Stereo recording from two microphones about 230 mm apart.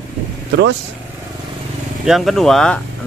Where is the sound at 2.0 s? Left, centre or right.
Centre.